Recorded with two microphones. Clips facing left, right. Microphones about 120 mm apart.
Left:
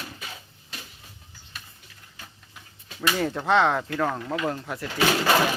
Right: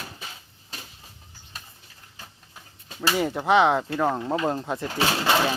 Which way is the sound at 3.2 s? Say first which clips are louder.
Right 2 dB; 10° right (ahead or behind).